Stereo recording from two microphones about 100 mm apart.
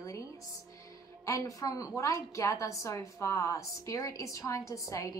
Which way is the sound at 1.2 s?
35° left (ahead or behind).